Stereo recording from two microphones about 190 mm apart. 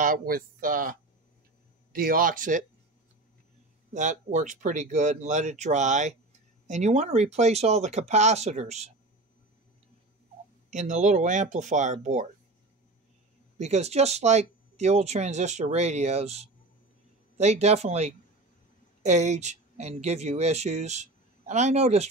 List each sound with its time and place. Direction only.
0.0 s speech: 50° right (ahead or behind)
3.9 s speech: 40° right (ahead or behind)
10.7 s speech: 40° right (ahead or behind)
13.6 s speech: 35° right (ahead or behind)